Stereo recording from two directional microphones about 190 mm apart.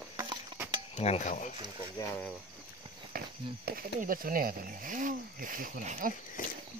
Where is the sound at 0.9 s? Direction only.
35° left (ahead or behind).